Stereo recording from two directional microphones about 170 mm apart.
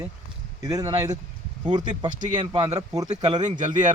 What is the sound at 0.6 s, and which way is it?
Speech, 20° right (ahead or behind).